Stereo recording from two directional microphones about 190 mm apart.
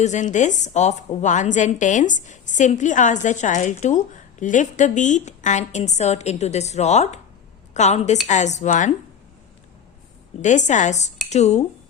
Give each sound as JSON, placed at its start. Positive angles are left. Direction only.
{"t": 0.0, "sound": "a woman's voice", "side_deg": 40}
{"t": 10.4, "sound": "a woman's voice", "side_deg": 40}